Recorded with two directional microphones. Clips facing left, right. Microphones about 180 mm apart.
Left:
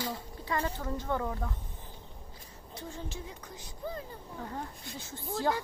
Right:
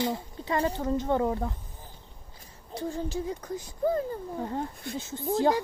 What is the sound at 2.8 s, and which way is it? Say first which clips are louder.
Speech: right 10 dB; 35° right (ahead or behind).